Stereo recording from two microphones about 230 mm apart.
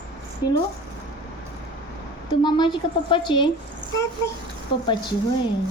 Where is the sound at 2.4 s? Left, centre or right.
Centre.